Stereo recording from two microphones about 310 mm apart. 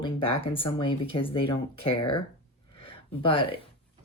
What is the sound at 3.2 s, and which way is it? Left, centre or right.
Speech, centre.